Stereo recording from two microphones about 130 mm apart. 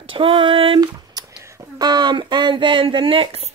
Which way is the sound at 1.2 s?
30° right (ahead or behind).